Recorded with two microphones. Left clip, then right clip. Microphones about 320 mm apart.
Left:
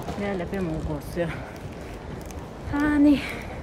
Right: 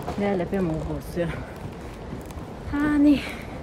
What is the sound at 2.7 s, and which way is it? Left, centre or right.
Speech, centre.